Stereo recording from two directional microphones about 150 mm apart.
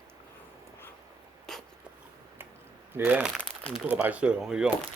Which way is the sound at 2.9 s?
10° right (ahead or behind).